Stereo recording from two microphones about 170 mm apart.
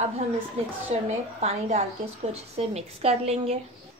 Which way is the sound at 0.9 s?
40° right (ahead or behind).